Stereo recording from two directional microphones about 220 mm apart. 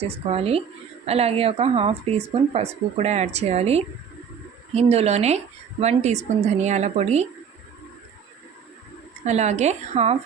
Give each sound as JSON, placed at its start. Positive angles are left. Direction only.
{"t": 0.0, "sound": "speech", "side_deg": -25}
{"t": 9.2, "sound": "speech", "side_deg": -30}